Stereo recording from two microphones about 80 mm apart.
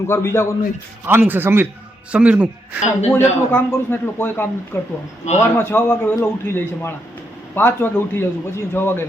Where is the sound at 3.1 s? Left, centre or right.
Left.